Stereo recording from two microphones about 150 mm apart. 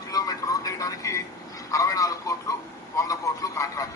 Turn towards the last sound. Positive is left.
turn(degrees=20)  # may be behind; listen again after turning